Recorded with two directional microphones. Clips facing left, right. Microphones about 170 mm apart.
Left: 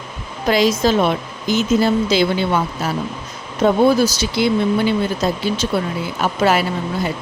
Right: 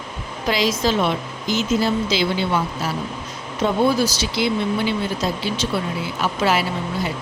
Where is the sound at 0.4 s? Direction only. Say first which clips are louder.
Left 5 dB; 50° left (ahead or behind).